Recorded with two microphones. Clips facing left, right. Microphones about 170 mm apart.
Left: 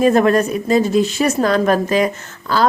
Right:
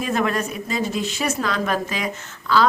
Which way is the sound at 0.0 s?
40° left (ahead or behind).